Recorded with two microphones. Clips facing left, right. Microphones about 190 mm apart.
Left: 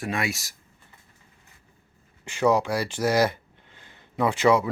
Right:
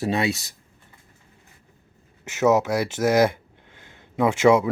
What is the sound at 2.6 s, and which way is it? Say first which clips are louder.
Speech: right 3 dB; 10° right (ahead or behind).